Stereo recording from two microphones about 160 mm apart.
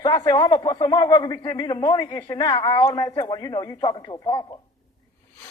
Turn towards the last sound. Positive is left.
turn(degrees=30)  # may be behind; listen again after turning